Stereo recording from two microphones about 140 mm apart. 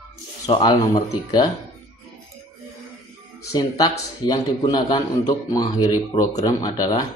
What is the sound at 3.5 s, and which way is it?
A man's voice, 25° left (ahead or behind).